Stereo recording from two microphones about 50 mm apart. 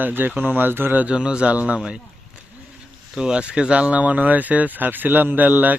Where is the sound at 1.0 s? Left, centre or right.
Centre.